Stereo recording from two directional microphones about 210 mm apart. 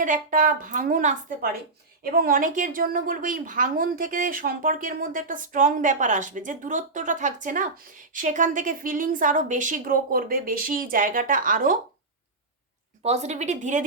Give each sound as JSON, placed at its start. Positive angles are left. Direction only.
{"t": 0.0, "sound": "a woman's voice", "side_deg": -40}
{"t": 13.0, "sound": "a woman's voice", "side_deg": -30}